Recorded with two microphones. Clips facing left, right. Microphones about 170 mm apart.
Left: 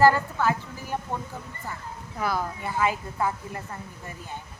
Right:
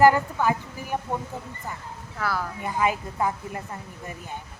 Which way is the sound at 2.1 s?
20° left (ahead or behind).